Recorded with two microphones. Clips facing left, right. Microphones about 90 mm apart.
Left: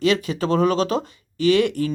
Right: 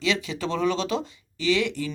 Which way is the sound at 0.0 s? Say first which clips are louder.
Left 6 dB; 50° left (ahead or behind).